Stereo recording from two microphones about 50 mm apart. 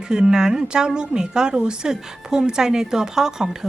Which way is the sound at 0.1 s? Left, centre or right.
Centre.